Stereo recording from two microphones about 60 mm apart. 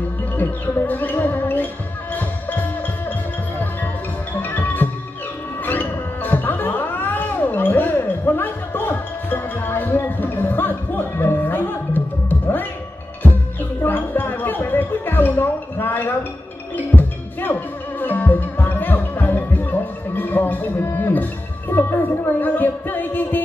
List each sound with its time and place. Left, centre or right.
0.4 s music: left
4.4 s music: left